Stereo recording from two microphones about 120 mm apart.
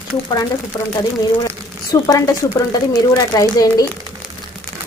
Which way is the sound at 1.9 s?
30° left (ahead or behind).